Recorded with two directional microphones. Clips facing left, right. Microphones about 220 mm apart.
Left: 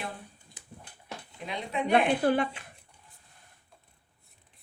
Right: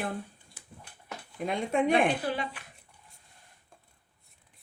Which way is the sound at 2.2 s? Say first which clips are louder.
Left 7 dB; 55° left (ahead or behind).